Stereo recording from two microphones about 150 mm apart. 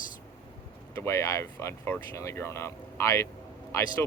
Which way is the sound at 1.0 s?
20° left (ahead or behind).